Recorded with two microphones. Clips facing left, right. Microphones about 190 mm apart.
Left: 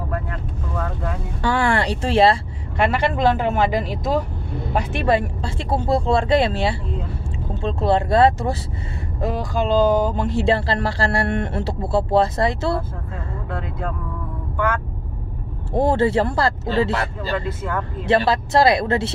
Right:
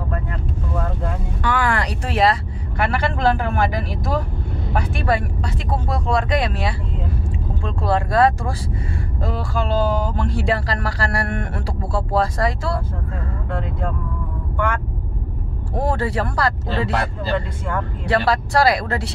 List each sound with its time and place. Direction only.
1.4 s speech: 30° left (ahead or behind)
13.5 s speech: 5° left (ahead or behind)
15.7 s speech: 25° left (ahead or behind)
17.5 s speech: 5° left (ahead or behind)
18.0 s speech: 25° left (ahead or behind)